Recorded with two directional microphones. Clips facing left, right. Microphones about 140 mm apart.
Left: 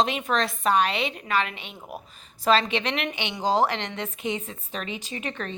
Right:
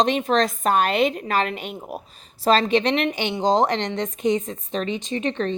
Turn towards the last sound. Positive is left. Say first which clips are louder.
# right 9 dB
turn(degrees=-30)  # may be behind; listen again after turning